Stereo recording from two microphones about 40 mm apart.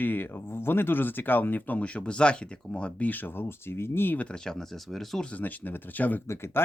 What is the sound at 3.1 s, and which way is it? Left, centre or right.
Speech, left.